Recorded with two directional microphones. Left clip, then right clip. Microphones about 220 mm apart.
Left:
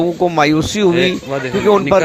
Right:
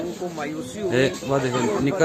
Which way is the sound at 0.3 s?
50° left (ahead or behind).